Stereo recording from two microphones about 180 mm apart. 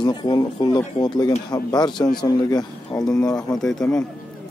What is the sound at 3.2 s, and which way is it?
Speech, 5° left (ahead or behind).